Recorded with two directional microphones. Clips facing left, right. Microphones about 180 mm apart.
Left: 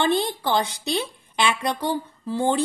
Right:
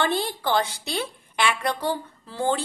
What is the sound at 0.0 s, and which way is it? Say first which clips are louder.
Music: left 3 dB; 20° left (ahead or behind).